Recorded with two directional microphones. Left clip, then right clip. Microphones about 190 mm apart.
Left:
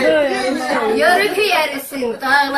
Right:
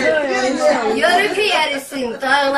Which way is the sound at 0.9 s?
5° right (ahead or behind).